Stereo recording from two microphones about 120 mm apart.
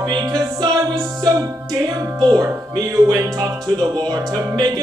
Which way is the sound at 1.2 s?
30° right (ahead or behind).